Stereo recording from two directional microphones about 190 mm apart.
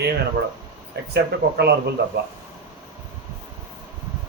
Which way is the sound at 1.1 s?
60° right (ahead or behind).